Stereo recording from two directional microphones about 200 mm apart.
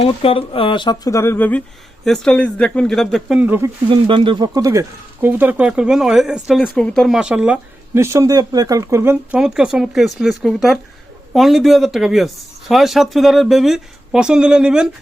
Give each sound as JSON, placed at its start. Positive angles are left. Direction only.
{"t": 0.0, "sound": "speech", "side_deg": 30}
{"t": 3.8, "sound": "speech", "side_deg": -25}